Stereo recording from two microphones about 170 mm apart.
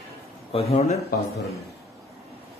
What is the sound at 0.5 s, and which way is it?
Speech, 35° left (ahead or behind).